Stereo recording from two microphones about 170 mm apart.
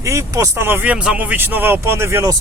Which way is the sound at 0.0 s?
15° right (ahead or behind).